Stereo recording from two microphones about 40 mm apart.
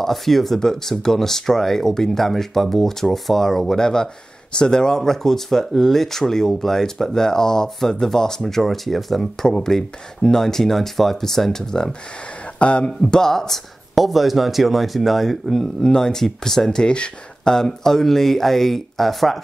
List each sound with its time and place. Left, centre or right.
0.0 s speech: centre
9.5 s speech: centre
12.5 s speech: left
13.0 s speech: centre
13.9 s speech: centre
15.8 s speech: centre